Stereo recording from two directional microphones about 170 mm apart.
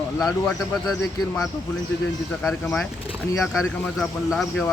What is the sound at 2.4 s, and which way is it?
Speech, 5° left (ahead or behind).